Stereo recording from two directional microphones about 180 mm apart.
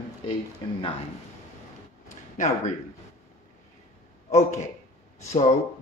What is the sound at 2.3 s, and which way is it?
Speech, 40° left (ahead or behind).